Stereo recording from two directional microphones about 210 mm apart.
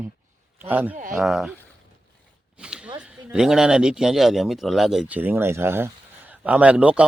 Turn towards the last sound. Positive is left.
turn(degrees=-5)  # may be behind; listen again after turning